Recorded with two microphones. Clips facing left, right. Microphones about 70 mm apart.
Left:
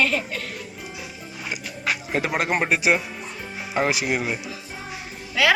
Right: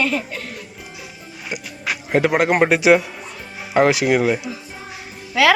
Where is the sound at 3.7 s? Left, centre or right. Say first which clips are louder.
Right 8 dB; right.